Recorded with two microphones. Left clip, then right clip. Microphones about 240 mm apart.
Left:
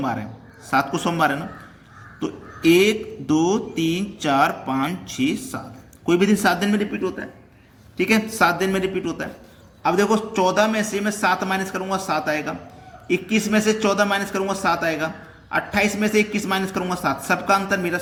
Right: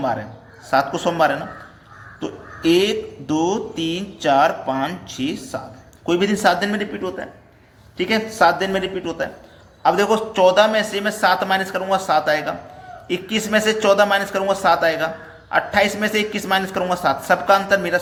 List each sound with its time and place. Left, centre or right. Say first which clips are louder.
0.0 s mantra: right 4 dB; centre
0.7 s a man's voice: right 3 dB; centre
2.2 s mantra: left 1 dB; centre
6.1 s a man's voice: right 2 dB; centre